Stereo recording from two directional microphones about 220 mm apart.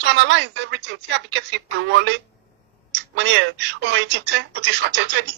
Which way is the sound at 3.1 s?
55° right (ahead or behind).